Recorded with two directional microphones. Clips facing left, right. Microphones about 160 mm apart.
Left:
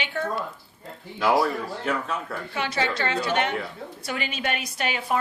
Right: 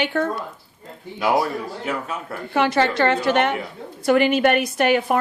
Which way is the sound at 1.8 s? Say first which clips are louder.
Left 2 dB; 10° right (ahead or behind).